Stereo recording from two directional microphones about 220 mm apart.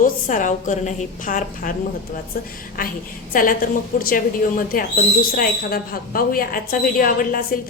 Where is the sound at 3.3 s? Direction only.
40° left (ahead or behind).